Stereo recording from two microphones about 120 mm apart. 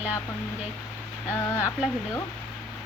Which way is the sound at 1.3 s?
20° left (ahead or behind).